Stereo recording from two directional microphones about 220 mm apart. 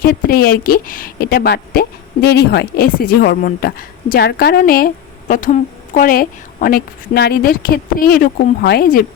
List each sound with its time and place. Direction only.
0.0 s a woman's voice: 45° left (ahead or behind)